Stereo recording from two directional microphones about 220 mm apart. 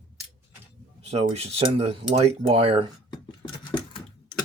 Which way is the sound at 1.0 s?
30° right (ahead or behind).